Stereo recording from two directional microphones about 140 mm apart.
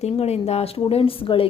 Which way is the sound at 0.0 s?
50° left (ahead or behind).